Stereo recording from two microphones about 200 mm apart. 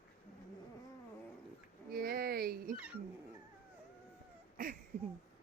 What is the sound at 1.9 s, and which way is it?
Dog, 50° right (ahead or behind).